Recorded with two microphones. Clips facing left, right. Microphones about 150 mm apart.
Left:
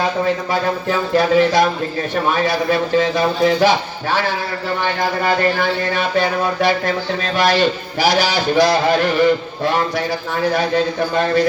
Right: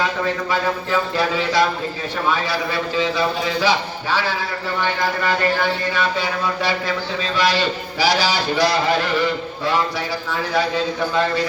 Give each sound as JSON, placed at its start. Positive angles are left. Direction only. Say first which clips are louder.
{"t": 1.1, "sound": "a man's voice", "louder": "left 10 dB", "side_deg": 45}
{"t": 5.9, "sound": "a man's voice", "louder": "left 4 dB", "side_deg": 50}